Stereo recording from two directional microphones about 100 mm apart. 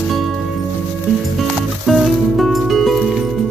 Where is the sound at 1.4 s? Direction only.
Centre (ahead or behind).